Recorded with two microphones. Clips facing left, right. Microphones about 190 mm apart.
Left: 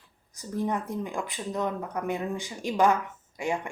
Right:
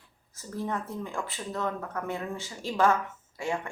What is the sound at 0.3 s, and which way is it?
Speech, 15° left (ahead or behind).